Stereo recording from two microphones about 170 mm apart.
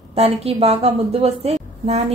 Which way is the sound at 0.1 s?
35° right (ahead or behind).